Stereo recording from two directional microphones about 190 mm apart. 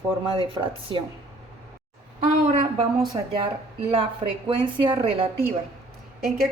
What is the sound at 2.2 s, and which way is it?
Speech, 35° right (ahead or behind).